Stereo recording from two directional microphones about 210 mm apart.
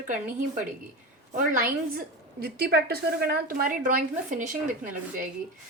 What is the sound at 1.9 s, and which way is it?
A woman's voice, 45° right (ahead or behind).